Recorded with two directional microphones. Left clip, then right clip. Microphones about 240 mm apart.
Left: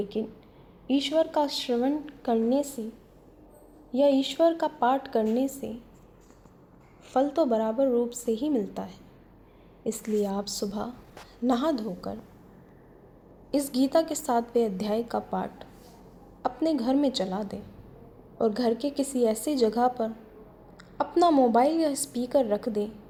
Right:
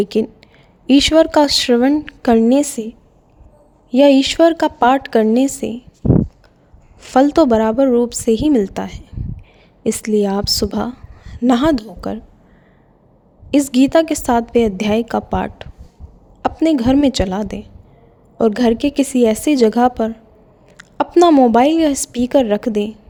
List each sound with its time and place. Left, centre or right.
0.0 s a woman's voice: right
3.9 s a woman's voice: right
7.0 s a woman's voice: right
13.5 s a woman's voice: right
21.0 s a woman's voice: right